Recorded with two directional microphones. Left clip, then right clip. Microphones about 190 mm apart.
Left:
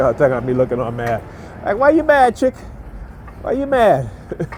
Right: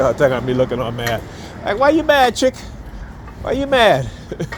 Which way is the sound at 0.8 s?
30° left (ahead or behind).